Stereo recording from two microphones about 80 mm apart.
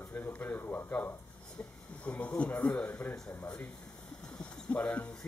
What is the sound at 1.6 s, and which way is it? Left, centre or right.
Speech, centre.